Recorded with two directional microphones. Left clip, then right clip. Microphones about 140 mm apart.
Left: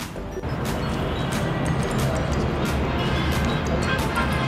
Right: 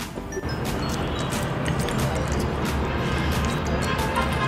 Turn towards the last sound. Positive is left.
turn(degrees=0)  # may be behind; listen again after turning